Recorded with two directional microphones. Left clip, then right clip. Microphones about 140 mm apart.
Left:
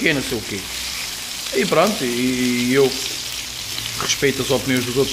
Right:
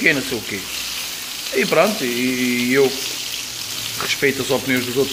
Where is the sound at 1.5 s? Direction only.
5° left (ahead or behind).